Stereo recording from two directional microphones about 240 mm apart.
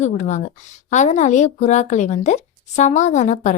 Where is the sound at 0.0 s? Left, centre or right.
Left.